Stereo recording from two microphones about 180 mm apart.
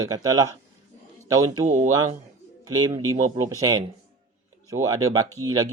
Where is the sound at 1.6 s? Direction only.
45° right (ahead or behind).